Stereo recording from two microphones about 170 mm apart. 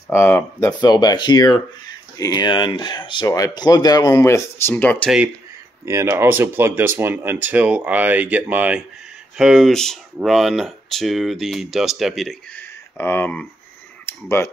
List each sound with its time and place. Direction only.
0.1 s speech: 15° left (ahead or behind)
0.7 s speech: 25° left (ahead or behind)
5.9 s speech: 15° right (ahead or behind); by 12.6 s centre (ahead or behind)
12.9 s speech: 10° left (ahead or behind)
14.0 s clicking: 15° left (ahead or behind)